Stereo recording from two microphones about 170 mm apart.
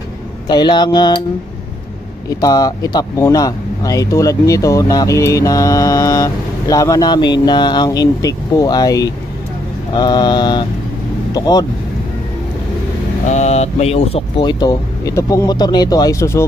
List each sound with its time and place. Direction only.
0.5 s speech: 25° left (ahead or behind)
2.4 s speech: 20° left (ahead or behind)
13.3 s speech: 40° left (ahead or behind); by 16.4 s 15° left (ahead or behind)